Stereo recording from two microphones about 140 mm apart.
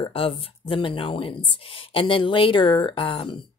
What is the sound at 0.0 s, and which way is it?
Speech, 45° left (ahead or behind).